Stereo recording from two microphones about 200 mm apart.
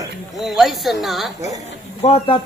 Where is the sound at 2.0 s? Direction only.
30° left (ahead or behind).